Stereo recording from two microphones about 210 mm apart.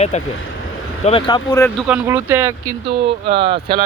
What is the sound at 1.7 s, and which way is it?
Speech, 5° right (ahead or behind).